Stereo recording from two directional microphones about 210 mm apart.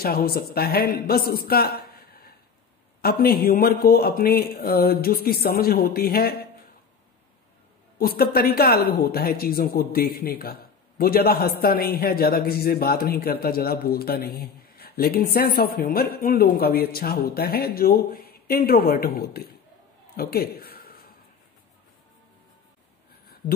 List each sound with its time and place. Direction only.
0.0 s speech: 45° left (ahead or behind)
8.0 s speech: 45° left (ahead or behind)
20.2 s a sound: 45° left (ahead or behind)